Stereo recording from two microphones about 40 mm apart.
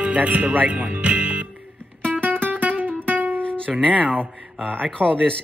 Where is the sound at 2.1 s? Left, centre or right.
Right.